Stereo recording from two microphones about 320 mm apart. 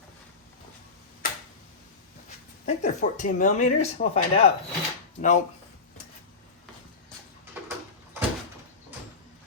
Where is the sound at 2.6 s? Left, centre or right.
Left.